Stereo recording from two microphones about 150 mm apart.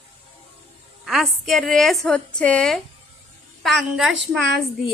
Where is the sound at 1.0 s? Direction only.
Centre (ahead or behind).